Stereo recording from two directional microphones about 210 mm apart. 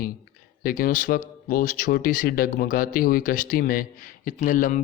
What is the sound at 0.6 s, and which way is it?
Speech, 45° left (ahead or behind).